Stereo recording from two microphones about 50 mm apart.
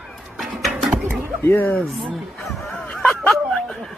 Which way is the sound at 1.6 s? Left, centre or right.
Left.